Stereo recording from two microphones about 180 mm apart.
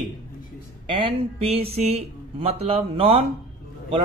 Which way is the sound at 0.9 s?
30° right (ahead or behind).